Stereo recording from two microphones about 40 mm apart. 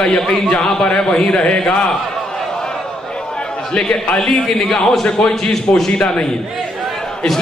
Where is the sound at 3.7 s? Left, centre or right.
Left.